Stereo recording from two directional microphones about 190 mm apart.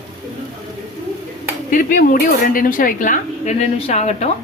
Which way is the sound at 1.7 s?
45° left (ahead or behind).